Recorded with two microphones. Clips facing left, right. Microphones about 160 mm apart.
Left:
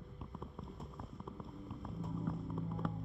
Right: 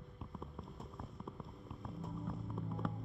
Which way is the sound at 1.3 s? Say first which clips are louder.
Left 2 dB; centre (ahead or behind).